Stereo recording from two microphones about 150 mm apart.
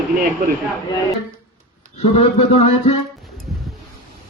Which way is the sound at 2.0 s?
45° left (ahead or behind).